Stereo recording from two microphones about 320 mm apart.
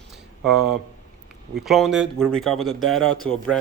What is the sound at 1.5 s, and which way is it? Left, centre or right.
Speech, centre.